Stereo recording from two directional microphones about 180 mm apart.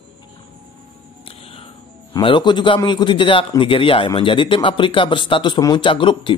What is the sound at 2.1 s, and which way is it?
A man's voice, 25° left (ahead or behind).